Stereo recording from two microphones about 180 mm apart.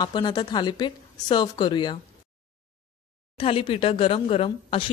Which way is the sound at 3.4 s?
30° left (ahead or behind).